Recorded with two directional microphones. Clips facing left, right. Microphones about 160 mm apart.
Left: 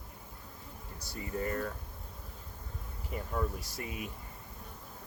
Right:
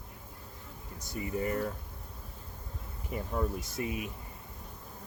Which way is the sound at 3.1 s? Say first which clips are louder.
Right 2 dB; 20° right (ahead or behind).